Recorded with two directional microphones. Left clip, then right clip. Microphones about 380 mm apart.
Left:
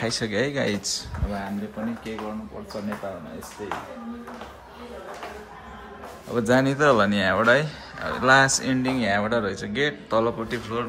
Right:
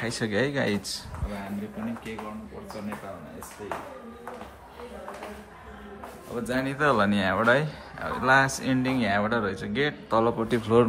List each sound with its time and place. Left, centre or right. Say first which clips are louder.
0.0 s a man's voice: left 2 dB; centre
6.3 s speech: left 9 dB; left
6.6 s a man's voice: even; centre